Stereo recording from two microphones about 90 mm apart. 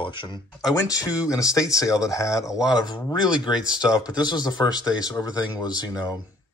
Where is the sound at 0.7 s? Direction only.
40° left (ahead or behind).